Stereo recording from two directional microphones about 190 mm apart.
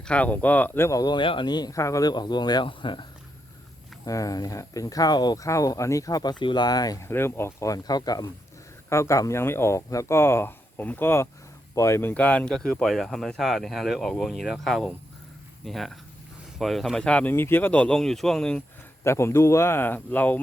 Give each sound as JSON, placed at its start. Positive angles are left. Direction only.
{"t": 0.0, "sound": "speech", "side_deg": 5}